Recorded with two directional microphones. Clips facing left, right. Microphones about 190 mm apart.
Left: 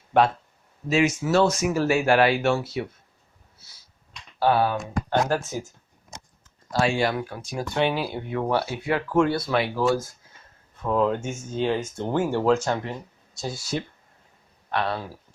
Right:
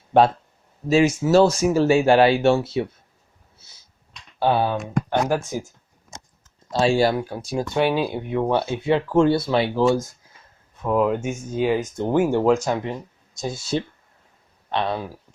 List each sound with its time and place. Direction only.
0.9 s speech: 30° right (ahead or behind)
4.4 s speech: 20° right (ahead or behind)
6.7 s speech: 25° right (ahead or behind)
10.8 s speech: 10° right (ahead or behind)